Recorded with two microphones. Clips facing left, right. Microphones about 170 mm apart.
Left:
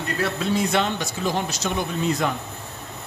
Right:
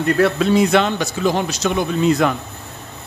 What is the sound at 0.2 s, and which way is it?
Speech, 75° right (ahead or behind).